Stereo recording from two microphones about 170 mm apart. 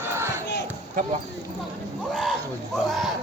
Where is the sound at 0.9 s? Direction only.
50° right (ahead or behind).